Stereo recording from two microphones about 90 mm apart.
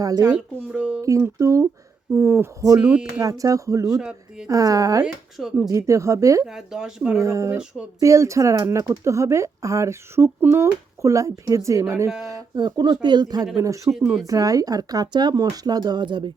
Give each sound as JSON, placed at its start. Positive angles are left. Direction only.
{"t": 0.0, "sound": "speech", "side_deg": -45}
{"t": 0.7, "sound": "speech", "side_deg": -10}
{"t": 1.4, "sound": "speech", "side_deg": -35}
{"t": 3.8, "sound": "speech", "side_deg": -5}
{"t": 4.4, "sound": "speech", "side_deg": -40}
{"t": 5.0, "sound": "speech", "side_deg": -5}
{"t": 5.6, "sound": "speech", "side_deg": -35}
{"t": 6.4, "sound": "speech", "side_deg": -5}
{"t": 7.2, "sound": "speech", "side_deg": -35}
{"t": 12.5, "sound": "speech", "side_deg": -55}
{"t": 13.6, "sound": "speech", "side_deg": -35}